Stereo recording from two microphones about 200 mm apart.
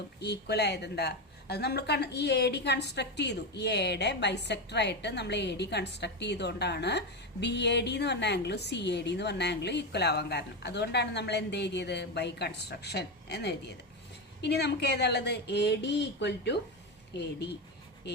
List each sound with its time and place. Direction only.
0.2 s a woman's voice: 55° left (ahead or behind)